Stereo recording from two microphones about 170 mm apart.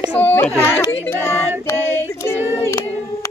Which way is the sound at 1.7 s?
15° left (ahead or behind).